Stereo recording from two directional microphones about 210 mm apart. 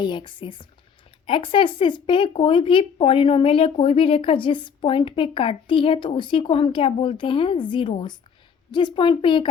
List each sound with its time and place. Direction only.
0.0 s speech: 20° left (ahead or behind)